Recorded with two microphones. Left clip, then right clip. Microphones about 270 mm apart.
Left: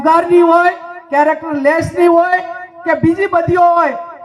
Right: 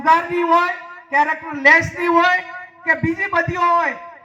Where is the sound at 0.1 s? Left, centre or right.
Right.